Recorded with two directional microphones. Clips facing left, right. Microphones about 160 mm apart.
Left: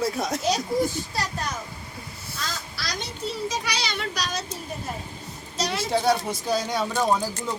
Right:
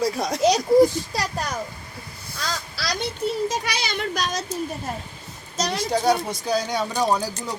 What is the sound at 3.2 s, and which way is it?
A child's voice, 50° right (ahead or behind).